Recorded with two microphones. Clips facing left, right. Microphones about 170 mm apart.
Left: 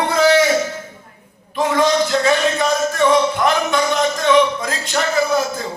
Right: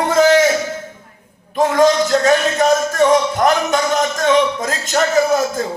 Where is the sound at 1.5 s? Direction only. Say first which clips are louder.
Right 3 dB; 45° right (ahead or behind).